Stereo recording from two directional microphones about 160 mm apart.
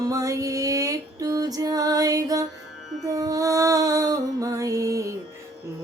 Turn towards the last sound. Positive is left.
turn(degrees=-20)  # may be behind; listen again after turning